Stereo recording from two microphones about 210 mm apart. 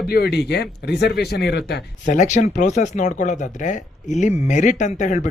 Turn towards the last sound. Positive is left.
turn(degrees=35)  # may be behind; listen again after turning